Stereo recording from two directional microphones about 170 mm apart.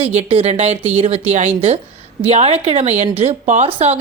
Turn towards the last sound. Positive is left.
turn(degrees=-40)  # may be behind; listen again after turning